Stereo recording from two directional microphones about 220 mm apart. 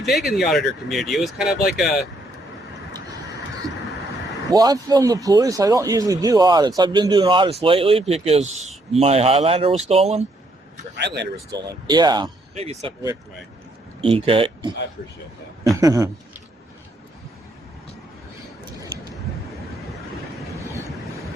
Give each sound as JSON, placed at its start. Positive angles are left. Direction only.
{"t": 0.0, "sound": "speech", "side_deg": 0}
{"t": 4.5, "sound": "a man's voice", "side_deg": -15}
{"t": 10.9, "sound": "speech", "side_deg": -50}
{"t": 11.5, "sound": "a man's voice", "side_deg": -20}
{"t": 14.0, "sound": "a man's voice", "side_deg": -25}
{"t": 15.7, "sound": "a woman's voice", "side_deg": -15}